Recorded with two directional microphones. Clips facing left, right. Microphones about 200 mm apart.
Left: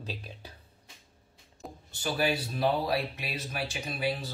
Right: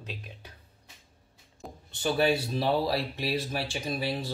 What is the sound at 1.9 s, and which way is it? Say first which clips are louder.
Speech: right 4 dB; 25° right (ahead or behind).